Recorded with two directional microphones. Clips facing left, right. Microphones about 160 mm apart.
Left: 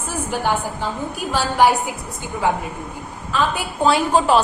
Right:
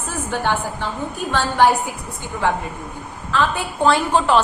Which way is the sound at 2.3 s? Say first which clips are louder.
Even; 20° left (ahead or behind).